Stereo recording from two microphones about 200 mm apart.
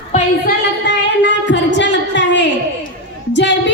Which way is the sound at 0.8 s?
60° left (ahead or behind).